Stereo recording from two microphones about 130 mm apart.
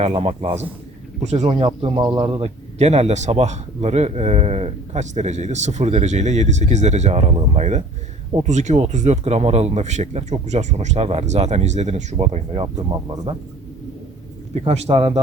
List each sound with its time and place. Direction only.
0.0 s speech: 50° right (ahead or behind); by 2.3 s 35° right (ahead or behind)
2.4 s speech: 60° right (ahead or behind)
14.5 s speech: 55° right (ahead or behind)